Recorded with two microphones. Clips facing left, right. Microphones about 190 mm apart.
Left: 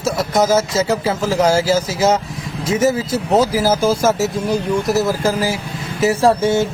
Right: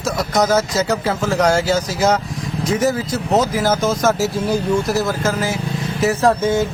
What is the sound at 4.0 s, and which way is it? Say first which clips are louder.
Speech: left 1 dB; centre (ahead or behind).